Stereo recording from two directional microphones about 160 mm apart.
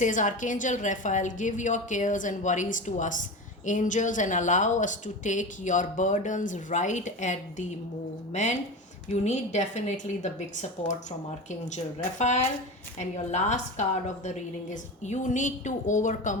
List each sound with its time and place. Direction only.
0.0 s speech: 50° left (ahead or behind)
12.2 s speech: 45° left (ahead or behind)